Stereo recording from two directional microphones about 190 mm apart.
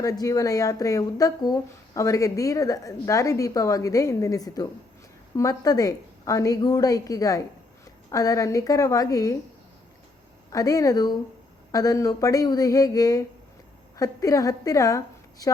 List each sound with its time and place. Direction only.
0.0 s a woman's voice: 15° left (ahead or behind)
10.5 s a woman's voice: 20° left (ahead or behind)